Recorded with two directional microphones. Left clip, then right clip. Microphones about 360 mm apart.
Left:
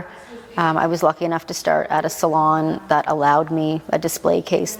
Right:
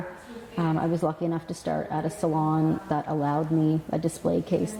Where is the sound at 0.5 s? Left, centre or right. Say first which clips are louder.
Left 10 dB; centre.